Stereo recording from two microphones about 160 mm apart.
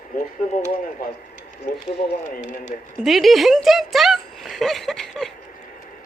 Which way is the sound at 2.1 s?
55° left (ahead or behind).